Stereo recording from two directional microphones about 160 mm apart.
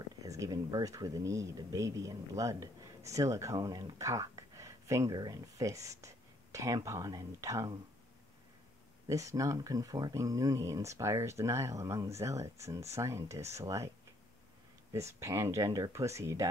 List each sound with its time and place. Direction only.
0.2 s speech: 20° right (ahead or behind)
9.0 s speech: 20° right (ahead or behind)
14.9 s speech: 20° right (ahead or behind)